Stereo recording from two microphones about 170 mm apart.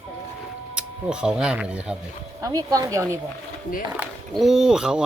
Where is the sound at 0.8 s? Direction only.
5° right (ahead or behind).